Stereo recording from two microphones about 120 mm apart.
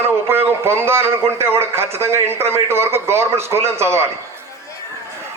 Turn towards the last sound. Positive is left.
turn(degrees=-20)  # may be behind; listen again after turning